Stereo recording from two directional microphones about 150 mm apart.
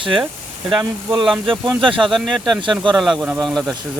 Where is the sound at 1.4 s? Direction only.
35° right (ahead or behind).